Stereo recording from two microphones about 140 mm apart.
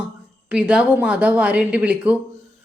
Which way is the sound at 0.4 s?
10° right (ahead or behind).